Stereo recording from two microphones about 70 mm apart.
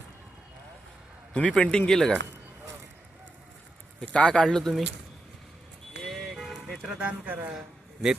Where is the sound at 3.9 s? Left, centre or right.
Centre.